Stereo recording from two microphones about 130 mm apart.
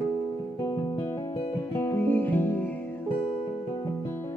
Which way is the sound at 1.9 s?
15° left (ahead or behind).